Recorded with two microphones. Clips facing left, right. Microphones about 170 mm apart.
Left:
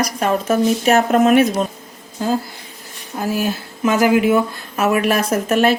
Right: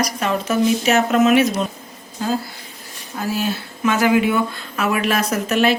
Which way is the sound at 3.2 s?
50° left (ahead or behind).